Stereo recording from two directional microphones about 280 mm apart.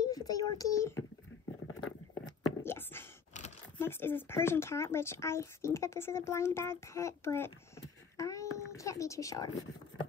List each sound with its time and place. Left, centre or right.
0.0 s speech: centre
1.9 s a sound: left
2.6 s whispering: centre
3.7 s speech: centre
8.2 s a sound: centre
8.5 s a woman's voice: centre